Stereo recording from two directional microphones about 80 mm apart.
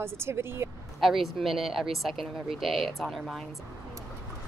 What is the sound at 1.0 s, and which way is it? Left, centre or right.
Speech, centre.